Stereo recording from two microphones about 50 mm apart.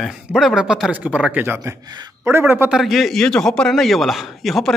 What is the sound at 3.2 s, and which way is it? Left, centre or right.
Speech, centre.